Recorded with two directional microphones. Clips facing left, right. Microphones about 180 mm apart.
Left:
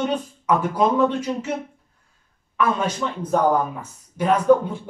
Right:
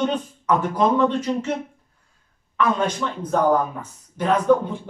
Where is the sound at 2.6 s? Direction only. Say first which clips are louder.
Right 1 dB; 10° left (ahead or behind).